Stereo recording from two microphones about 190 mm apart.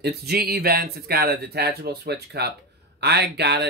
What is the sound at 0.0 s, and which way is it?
Speech, 55° right (ahead or behind).